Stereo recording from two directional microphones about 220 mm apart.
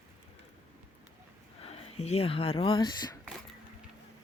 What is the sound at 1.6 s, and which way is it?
Speech, 25° left (ahead or behind).